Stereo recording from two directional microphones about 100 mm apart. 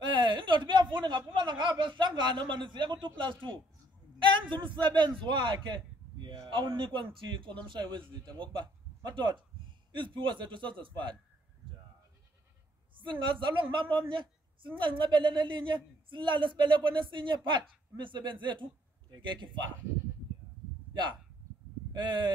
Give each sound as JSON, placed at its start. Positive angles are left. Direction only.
{"t": 0.0, "sound": "a woman's voice", "side_deg": -50}
{"t": 13.0, "sound": "a woman's voice", "side_deg": -50}
{"t": 21.9, "sound": "a woman's voice", "side_deg": -50}